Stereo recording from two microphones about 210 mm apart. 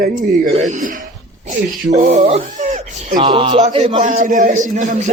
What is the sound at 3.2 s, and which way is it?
A man's voice, 20° right (ahead or behind).